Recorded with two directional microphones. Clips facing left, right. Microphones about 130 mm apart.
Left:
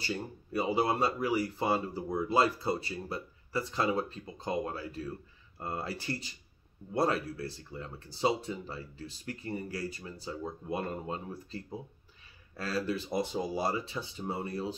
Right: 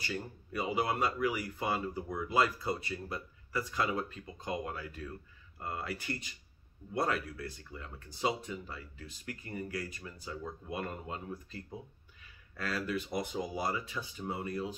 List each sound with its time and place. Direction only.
0.0 s speech: 30° left (ahead or behind)